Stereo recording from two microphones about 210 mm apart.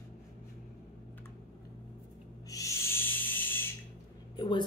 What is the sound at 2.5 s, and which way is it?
Owl, 15° left (ahead or behind).